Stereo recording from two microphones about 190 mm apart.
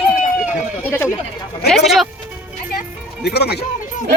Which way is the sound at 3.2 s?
60° left (ahead or behind).